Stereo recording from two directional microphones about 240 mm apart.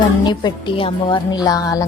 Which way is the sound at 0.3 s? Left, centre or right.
Centre.